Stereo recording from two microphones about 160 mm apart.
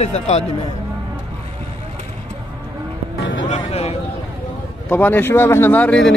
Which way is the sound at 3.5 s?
40° left (ahead or behind).